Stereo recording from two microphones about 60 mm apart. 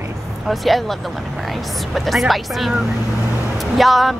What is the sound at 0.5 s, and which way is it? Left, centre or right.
Speech, centre.